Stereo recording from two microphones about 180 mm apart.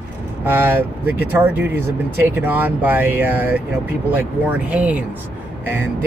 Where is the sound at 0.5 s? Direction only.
10° right (ahead or behind).